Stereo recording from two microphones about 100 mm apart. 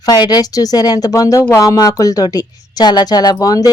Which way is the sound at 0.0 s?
40° left (ahead or behind).